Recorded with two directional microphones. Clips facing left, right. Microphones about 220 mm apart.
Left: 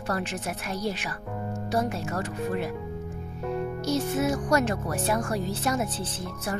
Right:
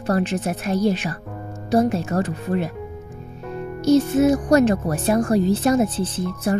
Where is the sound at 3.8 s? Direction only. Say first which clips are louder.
Right 11 dB; 20° right (ahead or behind).